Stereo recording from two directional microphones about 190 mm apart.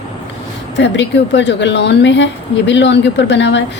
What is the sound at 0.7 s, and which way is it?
A woman's voice, 70° left (ahead or behind).